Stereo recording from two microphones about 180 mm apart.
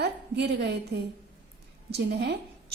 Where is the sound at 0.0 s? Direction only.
65° right (ahead or behind).